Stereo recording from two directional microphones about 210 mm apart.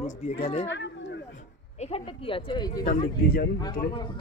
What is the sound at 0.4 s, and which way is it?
Speech, 25° left (ahead or behind).